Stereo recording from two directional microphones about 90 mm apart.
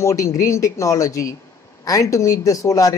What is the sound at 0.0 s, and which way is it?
Speech, 35° left (ahead or behind).